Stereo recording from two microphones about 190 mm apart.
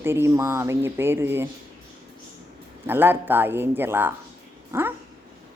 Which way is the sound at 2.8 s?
10° right (ahead or behind).